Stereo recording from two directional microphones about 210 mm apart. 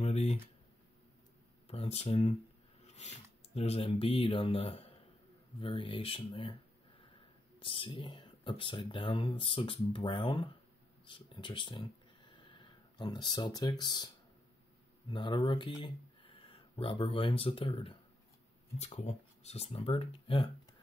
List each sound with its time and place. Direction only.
0.0 s a sound: 30° left (ahead or behind)
1.7 s speech: 30° left (ahead or behind)
7.5 s speech: 25° left (ahead or behind)